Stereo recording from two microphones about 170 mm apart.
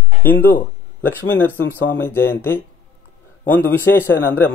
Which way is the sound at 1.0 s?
10° left (ahead or behind).